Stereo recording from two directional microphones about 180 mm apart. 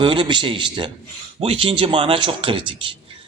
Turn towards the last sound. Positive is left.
turn(degrees=-30)  # may be behind; listen again after turning